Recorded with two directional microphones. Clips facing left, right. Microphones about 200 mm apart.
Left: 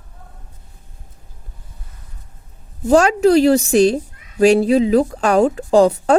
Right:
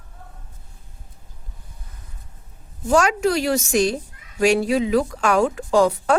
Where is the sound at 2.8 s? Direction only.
35° left (ahead or behind).